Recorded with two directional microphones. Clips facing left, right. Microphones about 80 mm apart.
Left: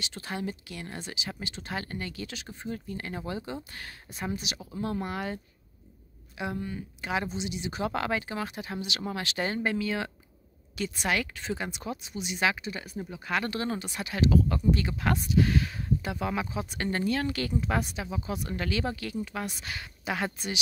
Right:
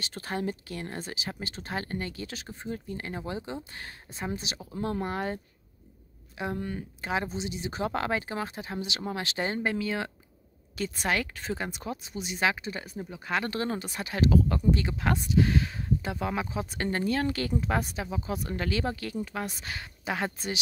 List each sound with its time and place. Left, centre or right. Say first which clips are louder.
0.0 s speech: right 2 dB; right